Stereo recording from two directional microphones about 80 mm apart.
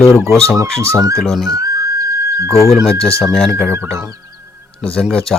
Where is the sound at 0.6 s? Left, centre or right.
Right.